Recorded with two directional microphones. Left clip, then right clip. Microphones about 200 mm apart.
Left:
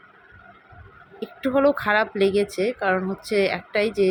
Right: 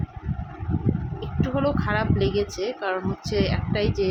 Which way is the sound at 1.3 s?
20° left (ahead or behind).